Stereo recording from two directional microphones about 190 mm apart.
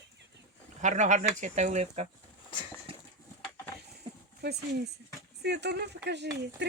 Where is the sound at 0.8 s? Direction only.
40° right (ahead or behind).